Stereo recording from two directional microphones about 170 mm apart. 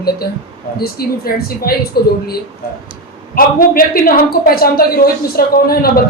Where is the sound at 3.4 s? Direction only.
60° left (ahead or behind).